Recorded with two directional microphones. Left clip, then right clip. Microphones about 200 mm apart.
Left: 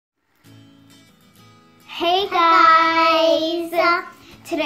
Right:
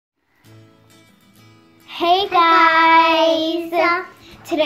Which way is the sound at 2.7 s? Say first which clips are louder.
Right 2 dB; 30° right (ahead or behind).